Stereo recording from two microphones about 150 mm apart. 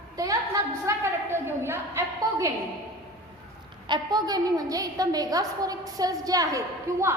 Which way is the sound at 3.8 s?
30° right (ahead or behind).